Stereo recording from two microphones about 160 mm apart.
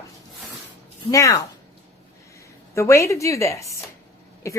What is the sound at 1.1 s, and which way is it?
Speech, 20° left (ahead or behind).